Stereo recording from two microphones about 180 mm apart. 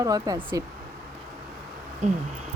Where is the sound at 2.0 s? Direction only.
40° right (ahead or behind).